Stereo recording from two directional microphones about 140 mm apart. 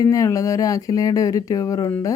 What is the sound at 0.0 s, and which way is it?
Speech, 25° left (ahead or behind).